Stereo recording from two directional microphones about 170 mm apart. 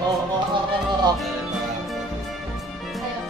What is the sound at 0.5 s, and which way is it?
Speech, 25° right (ahead or behind).